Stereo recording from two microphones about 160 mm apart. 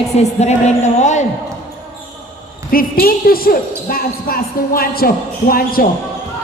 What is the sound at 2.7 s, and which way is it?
Speech, 65° left (ahead or behind).